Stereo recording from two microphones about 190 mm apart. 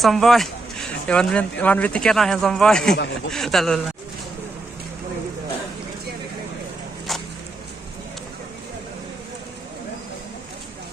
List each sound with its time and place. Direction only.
0.0 s speech: centre (ahead or behind)
2.9 s speech: 65° left (ahead or behind)
3.3 s speech: centre (ahead or behind)
7.1 s a sound: centre (ahead or behind)